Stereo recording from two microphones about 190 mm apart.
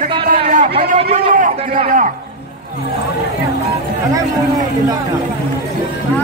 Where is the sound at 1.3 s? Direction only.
45° right (ahead or behind).